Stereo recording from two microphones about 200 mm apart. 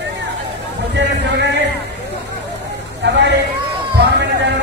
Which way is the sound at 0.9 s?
60° right (ahead or behind).